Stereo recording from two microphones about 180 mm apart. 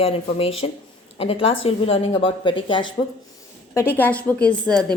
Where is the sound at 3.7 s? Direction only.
15° left (ahead or behind).